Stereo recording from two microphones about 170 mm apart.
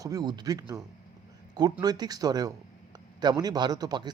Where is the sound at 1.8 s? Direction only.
25° right (ahead or behind).